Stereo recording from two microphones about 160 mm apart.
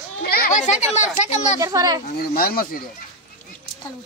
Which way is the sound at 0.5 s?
45° left (ahead or behind).